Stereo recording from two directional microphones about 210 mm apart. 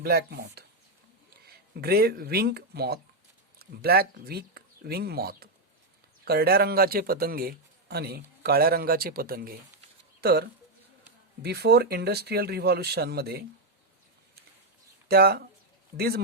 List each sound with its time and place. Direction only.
0.0 s speech: 50° right (ahead or behind)
15.0 s speech: 50° right (ahead or behind)